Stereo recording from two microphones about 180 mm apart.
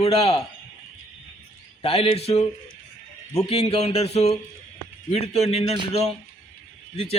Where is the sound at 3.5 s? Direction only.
35° left (ahead or behind).